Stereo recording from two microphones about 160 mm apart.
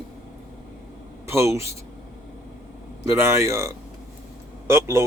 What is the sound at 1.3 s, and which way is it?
Speech, 15° right (ahead or behind).